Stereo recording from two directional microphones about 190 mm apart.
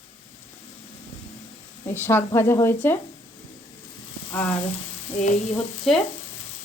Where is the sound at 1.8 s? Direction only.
10° left (ahead or behind).